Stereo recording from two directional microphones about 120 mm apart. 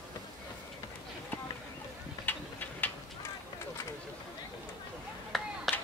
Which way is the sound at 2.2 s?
15° left (ahead or behind).